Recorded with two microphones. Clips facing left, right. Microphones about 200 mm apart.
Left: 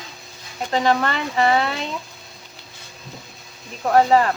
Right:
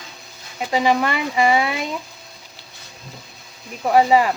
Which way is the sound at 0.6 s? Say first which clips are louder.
Right 1 dB; 10° right (ahead or behind).